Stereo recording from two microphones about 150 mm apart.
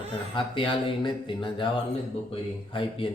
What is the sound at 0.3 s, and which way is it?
A man's voice, 35° left (ahead or behind).